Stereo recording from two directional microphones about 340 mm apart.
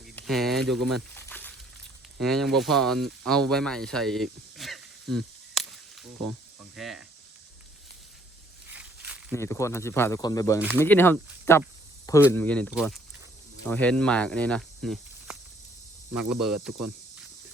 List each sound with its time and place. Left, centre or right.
0.2 s speech: centre
8.7 s a sound: centre
9.3 s speech: centre